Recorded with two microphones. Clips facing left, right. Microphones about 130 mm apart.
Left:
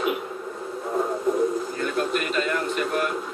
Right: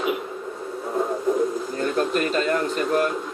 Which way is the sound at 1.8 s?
35° right (ahead or behind).